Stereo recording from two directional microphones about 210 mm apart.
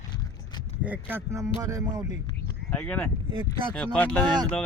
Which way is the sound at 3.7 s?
5° left (ahead or behind).